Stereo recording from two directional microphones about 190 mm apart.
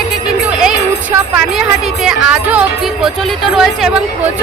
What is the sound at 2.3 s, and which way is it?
Music, 5° right (ahead or behind).